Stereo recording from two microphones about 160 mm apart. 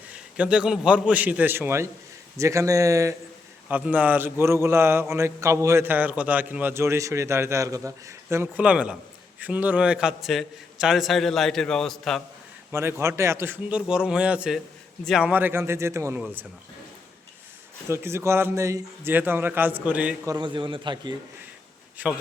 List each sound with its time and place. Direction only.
0.1 s a man's voice: 5° right (ahead or behind)
3.7 s a man's voice: 10° right (ahead or behind)
12.7 s a man's voice: 15° right (ahead or behind); by 15.3 s centre (ahead or behind)
15.3 s a man's voice: 10° right (ahead or behind)
17.8 s a man's voice: 15° right (ahead or behind)
20.2 s a man's voice: 30° right (ahead or behind)
22.0 s a man's voice: 10° right (ahead or behind)